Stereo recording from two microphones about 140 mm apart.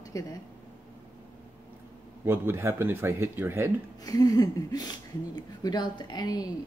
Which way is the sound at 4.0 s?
25° left (ahead or behind).